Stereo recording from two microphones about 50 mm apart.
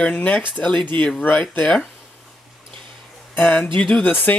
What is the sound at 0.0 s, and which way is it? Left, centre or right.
Speech, left.